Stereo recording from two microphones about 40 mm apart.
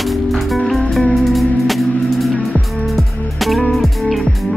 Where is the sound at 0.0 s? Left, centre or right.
Centre.